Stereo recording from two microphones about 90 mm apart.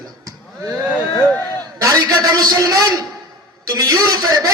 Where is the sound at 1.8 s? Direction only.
40° right (ahead or behind).